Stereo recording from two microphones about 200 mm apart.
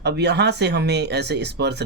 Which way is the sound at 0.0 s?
55° right (ahead or behind).